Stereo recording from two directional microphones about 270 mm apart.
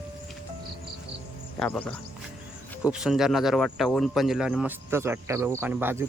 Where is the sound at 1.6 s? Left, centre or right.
Centre.